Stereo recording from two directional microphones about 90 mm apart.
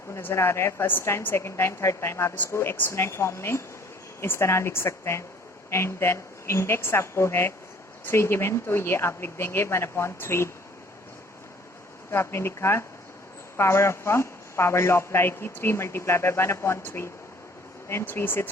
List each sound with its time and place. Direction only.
0.1 s a man's voice: 25° left (ahead or behind)
12.1 s a man's voice: 30° left (ahead or behind)